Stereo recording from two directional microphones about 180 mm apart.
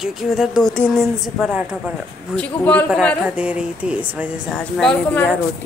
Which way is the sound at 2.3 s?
10° left (ahead or behind).